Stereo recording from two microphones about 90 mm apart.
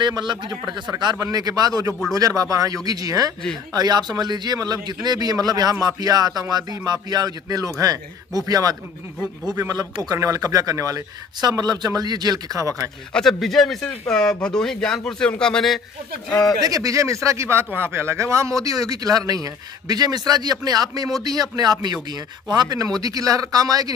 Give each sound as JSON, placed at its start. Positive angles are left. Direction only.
{"t": 0.0, "sound": "a man's voice", "side_deg": -55}
{"t": 1.3, "sound": "speech", "side_deg": -45}
{"t": 13.1, "sound": "speech", "side_deg": 5}
{"t": 16.5, "sound": "speech", "side_deg": -40}